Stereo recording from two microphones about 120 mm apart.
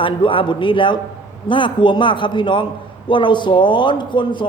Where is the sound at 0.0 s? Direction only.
45° left (ahead or behind).